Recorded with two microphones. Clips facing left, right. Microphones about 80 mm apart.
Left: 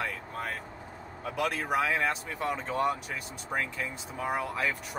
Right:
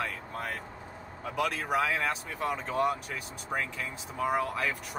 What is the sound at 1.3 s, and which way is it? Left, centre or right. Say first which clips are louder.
Speech: even; centre.